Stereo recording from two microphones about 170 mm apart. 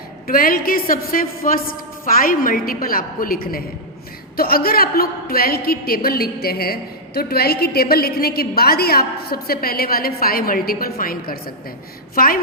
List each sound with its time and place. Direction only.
0.3 s a woman's voice: 55° left (ahead or behind)